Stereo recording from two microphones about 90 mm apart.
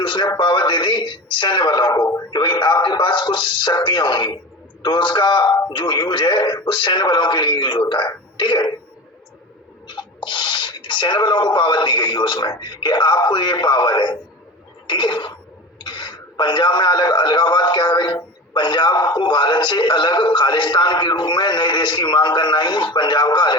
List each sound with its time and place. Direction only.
0.0 s a man's voice: 60° left (ahead or behind)
9.9 s a man's voice: 60° left (ahead or behind)
14.8 s a sound: 60° left (ahead or behind)
15.8 s a man's voice: 60° left (ahead or behind)